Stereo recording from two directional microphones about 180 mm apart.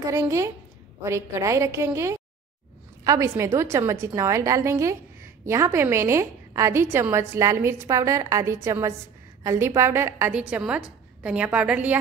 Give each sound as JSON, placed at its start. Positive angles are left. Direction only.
{"t": 0.0, "sound": "a woman's voice", "side_deg": -15}